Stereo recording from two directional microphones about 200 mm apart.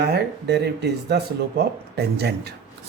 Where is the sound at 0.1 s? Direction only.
55° right (ahead or behind).